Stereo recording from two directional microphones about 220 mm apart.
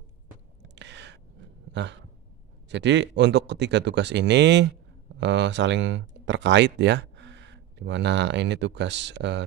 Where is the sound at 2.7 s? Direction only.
55° right (ahead or behind).